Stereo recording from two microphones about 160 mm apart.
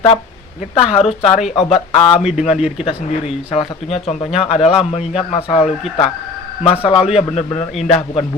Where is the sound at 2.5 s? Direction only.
5° right (ahead or behind).